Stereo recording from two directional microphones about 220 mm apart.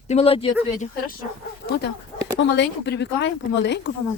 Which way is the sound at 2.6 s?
50° left (ahead or behind).